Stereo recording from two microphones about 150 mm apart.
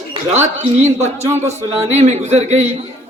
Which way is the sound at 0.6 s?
50° right (ahead or behind).